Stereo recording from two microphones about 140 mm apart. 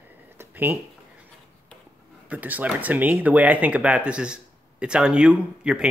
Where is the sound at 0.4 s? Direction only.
15° right (ahead or behind).